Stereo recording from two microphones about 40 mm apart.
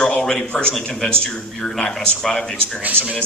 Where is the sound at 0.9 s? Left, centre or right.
Centre.